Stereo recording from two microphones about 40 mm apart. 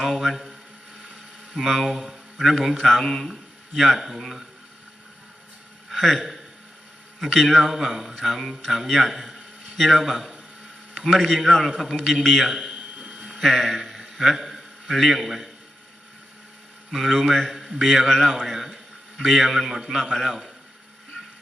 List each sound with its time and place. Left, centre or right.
0.0 s a man's voice: centre
1.5 s a man's voice: centre
5.9 s a man's voice: centre
9.0 s a sound: centre
9.8 s a man's voice: centre
10.9 s a sound: centre
11.3 s a man's voice: centre
12.5 s a man's voice: centre
12.7 s a sound: right
13.1 s a sound: centre
14.2 s a man's voice: centre
16.9 s a man's voice: centre